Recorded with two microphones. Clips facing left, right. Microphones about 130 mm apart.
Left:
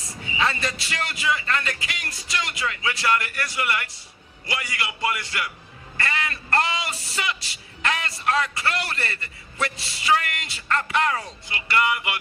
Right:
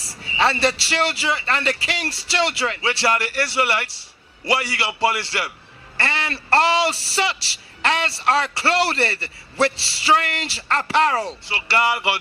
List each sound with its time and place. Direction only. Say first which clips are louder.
0.4 s a man's voice: right 6 dB; 30° right (ahead or behind)